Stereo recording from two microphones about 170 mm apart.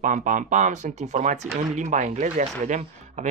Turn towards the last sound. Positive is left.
turn(degrees=-45)  # may be behind; listen again after turning